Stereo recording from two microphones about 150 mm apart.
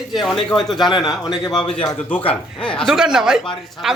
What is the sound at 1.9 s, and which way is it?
Speech, 10° left (ahead or behind).